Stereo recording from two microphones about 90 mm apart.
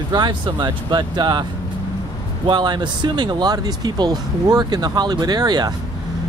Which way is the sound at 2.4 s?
55° right (ahead or behind).